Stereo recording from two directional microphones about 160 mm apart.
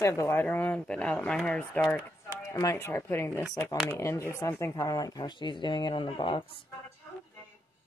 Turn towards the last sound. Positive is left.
turn(degrees=30)  # may be behind; listen again after turning